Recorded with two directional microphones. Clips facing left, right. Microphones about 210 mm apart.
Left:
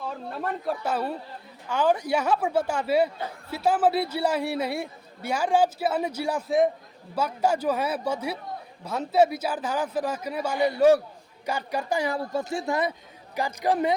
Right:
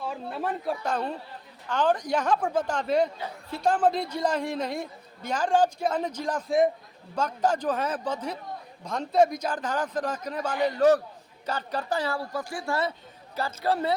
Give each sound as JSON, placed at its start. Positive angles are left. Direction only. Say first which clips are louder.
{"t": 0.0, "sound": "a man's voice", "louder": "even", "side_deg": -5}